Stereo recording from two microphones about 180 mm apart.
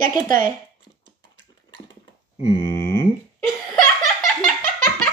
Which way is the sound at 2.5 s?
15° left (ahead or behind).